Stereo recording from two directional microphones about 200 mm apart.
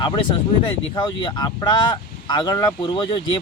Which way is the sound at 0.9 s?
20° left (ahead or behind).